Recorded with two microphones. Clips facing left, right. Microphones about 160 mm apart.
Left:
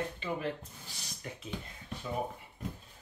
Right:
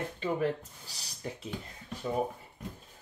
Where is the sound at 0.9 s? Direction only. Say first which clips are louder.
Right 5 dB; 35° right (ahead or behind).